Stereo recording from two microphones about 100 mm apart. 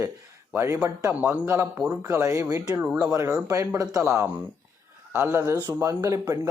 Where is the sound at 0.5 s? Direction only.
25° right (ahead or behind).